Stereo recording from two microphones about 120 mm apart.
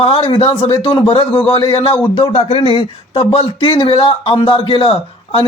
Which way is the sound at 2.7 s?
45° left (ahead or behind).